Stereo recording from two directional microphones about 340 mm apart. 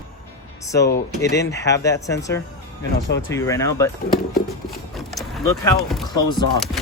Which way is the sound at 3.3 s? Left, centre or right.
Centre.